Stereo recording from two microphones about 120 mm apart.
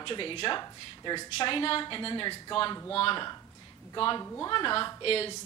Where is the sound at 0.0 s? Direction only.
45° left (ahead or behind).